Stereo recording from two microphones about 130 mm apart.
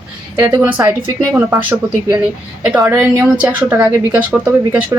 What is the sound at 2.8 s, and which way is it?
A woman's voice, 15° right (ahead or behind).